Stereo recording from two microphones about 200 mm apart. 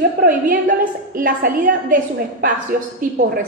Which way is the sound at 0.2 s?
45° right (ahead or behind).